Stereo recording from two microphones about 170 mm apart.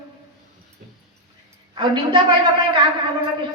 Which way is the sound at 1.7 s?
30° right (ahead or behind).